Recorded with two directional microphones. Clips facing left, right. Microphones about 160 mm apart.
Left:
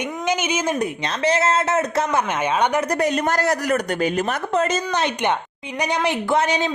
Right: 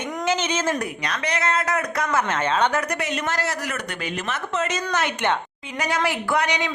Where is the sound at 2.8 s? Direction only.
35° left (ahead or behind).